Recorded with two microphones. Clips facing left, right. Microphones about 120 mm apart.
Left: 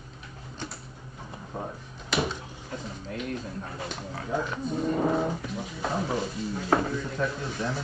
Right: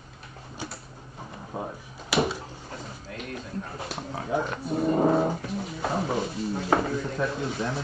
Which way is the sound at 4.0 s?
30° right (ahead or behind).